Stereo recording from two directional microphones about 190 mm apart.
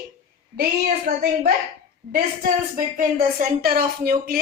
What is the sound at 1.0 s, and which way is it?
A woman's voice, 50° right (ahead or behind).